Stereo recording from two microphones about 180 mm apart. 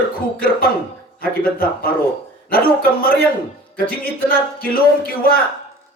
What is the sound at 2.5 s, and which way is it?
Speech, 55° left (ahead or behind).